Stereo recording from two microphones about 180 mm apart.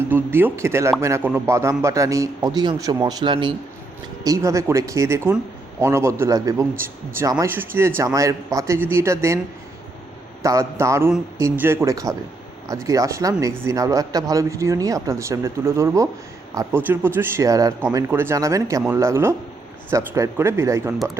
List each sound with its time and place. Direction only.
0.1 s a man's voice: 10° right (ahead or behind)
10.4 s a man's voice: 15° right (ahead or behind)